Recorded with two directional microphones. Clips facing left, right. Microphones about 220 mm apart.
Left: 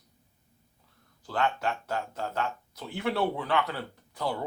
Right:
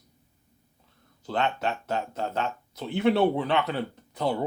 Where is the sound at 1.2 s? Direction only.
20° right (ahead or behind).